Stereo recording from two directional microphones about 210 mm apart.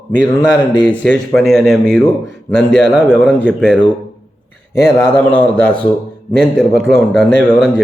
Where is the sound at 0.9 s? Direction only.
5° left (ahead or behind).